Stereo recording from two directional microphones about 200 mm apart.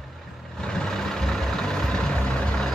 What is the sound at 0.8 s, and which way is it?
Vehicle, 5° left (ahead or behind).